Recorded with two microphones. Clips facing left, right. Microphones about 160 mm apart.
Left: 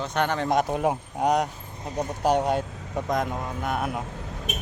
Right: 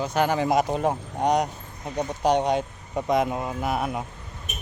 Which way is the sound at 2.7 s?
90° left.